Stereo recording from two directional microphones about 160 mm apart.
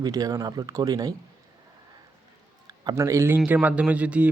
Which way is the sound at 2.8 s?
20° right (ahead or behind).